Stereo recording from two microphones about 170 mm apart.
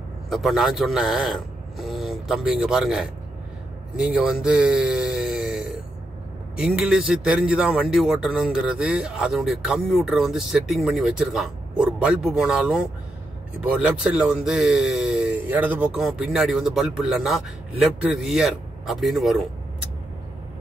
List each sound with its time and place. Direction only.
0.3 s a man's voice: centre (ahead or behind)